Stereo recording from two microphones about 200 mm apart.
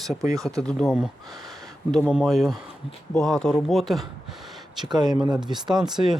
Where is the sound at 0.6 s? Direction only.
5° left (ahead or behind).